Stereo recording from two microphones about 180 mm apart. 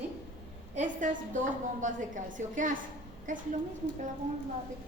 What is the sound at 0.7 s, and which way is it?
A woman's voice, 45° right (ahead or behind).